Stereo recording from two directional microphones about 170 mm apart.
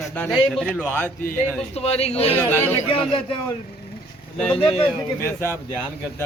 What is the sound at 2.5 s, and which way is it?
Speech, 10° left (ahead or behind).